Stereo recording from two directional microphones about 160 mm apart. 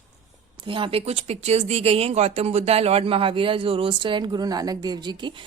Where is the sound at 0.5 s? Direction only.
30° right (ahead or behind).